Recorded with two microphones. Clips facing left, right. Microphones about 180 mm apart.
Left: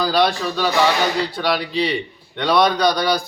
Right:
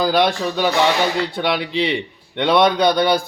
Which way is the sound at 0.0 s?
20° right (ahead or behind).